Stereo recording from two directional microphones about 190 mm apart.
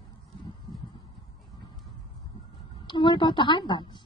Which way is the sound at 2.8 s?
25° left (ahead or behind).